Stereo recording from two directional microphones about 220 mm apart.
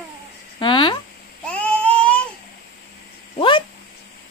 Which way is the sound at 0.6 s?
20° left (ahead or behind).